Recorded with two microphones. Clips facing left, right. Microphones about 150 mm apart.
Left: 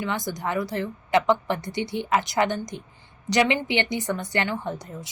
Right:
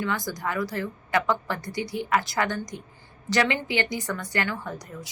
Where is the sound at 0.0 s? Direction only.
20° left (ahead or behind).